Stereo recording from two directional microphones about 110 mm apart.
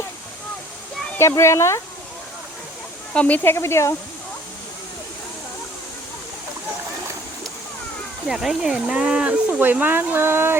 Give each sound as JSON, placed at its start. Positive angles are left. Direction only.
{"t": 1.4, "sound": "speech", "side_deg": 25}
{"t": 3.1, "sound": "speech", "side_deg": 10}
{"t": 8.3, "sound": "speech", "side_deg": -5}